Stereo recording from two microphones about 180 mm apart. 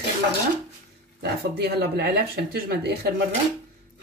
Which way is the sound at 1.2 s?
65° right (ahead or behind).